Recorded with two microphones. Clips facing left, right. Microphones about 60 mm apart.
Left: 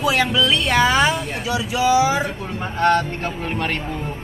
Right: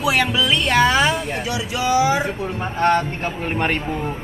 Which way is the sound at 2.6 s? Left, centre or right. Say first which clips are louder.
Left 1 dB; centre.